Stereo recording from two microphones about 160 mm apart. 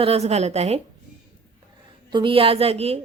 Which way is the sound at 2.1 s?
35° right (ahead or behind).